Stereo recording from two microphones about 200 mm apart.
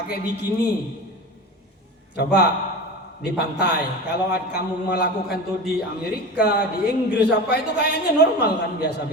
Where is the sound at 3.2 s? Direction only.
55° left (ahead or behind).